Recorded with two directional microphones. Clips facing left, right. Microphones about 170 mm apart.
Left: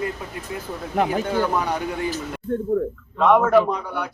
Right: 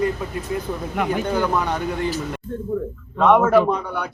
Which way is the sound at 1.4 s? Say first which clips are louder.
Right 1 dB; 10° left (ahead or behind).